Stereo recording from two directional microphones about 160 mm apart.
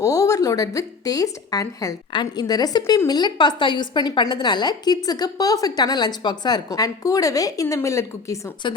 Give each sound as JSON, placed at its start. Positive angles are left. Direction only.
{"t": 0.0, "sound": "a woman's voice", "side_deg": 20}